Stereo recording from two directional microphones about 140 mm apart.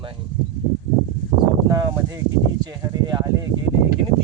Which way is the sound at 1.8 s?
25° right (ahead or behind).